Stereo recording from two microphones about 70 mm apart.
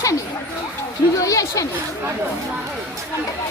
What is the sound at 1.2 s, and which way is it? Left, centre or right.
Speech, left.